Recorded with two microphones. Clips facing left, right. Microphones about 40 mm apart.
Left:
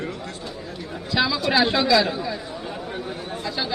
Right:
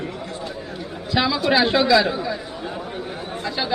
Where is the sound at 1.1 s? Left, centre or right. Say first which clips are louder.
Right 2 dB; centre.